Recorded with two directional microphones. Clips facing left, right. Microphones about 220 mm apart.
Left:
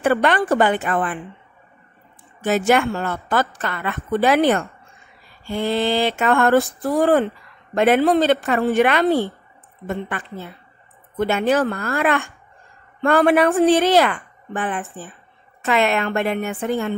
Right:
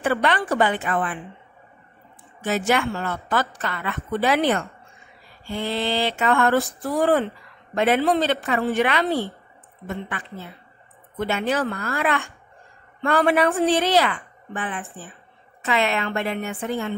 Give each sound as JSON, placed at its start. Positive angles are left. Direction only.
{"t": 0.0, "sound": "a woman's voice", "side_deg": 50}
{"t": 2.4, "sound": "a woman's voice", "side_deg": 50}